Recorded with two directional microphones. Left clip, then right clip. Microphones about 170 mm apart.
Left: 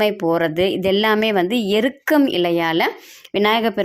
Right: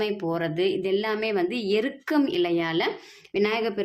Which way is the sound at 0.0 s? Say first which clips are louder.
Left 9 dB; 45° left (ahead or behind).